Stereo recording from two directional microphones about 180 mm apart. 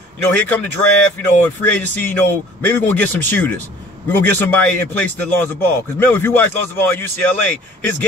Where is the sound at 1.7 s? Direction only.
10° left (ahead or behind).